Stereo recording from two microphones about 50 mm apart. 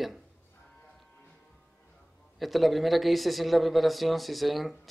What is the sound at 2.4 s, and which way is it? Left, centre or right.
Speech, centre.